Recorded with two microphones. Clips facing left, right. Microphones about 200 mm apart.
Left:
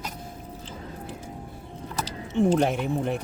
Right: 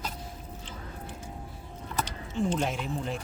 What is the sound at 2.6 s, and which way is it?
Speech, 60° left (ahead or behind).